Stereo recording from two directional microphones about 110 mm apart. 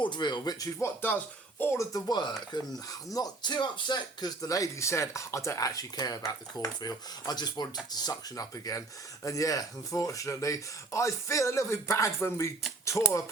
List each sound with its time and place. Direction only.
0.0 s speech: 45° left (ahead or behind)
0.8 s speech: 20° left (ahead or behind); by 4.3 s 45° left (ahead or behind)
4.4 s speech: 30° left (ahead or behind)